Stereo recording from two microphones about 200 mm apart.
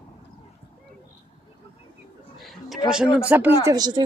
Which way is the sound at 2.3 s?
Centre (ahead or behind).